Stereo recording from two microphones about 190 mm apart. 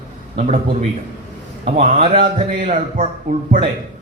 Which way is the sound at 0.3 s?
40° right (ahead or behind).